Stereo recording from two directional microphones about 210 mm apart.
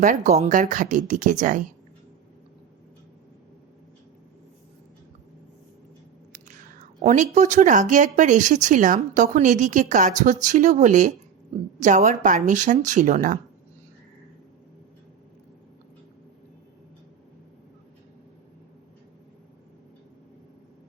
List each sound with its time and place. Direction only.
0.0 s speech: 35° right (ahead or behind)
7.0 s speech: 35° right (ahead or behind)